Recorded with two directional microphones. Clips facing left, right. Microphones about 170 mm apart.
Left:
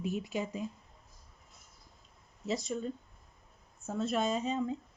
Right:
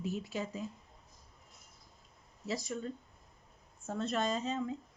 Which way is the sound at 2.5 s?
20° left (ahead or behind).